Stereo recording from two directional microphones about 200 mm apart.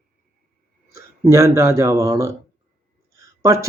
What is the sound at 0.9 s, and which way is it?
Speech, 15° right (ahead or behind).